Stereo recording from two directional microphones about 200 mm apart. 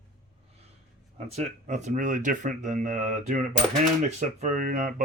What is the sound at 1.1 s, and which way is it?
Speech, 30° right (ahead or behind).